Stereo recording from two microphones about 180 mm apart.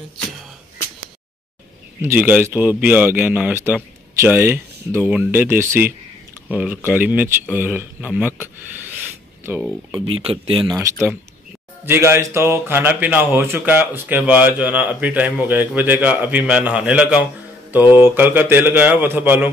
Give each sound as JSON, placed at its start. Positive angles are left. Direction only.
{"t": 2.0, "sound": "speech", "side_deg": -10}
{"t": 9.5, "sound": "speech", "side_deg": -10}
{"t": 9.8, "sound": "speech", "side_deg": -25}
{"t": 11.8, "sound": "speech", "side_deg": -15}